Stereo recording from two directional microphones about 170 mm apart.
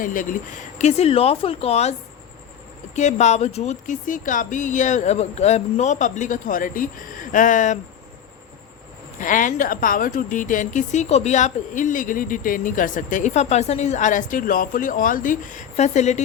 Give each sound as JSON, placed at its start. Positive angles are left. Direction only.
{"t": 0.0, "sound": "a woman's voice", "side_deg": 50}
{"t": 9.1, "sound": "a woman's voice", "side_deg": 50}